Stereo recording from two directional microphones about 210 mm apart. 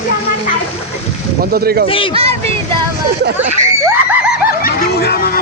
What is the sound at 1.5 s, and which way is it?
Speech, 45° right (ahead or behind).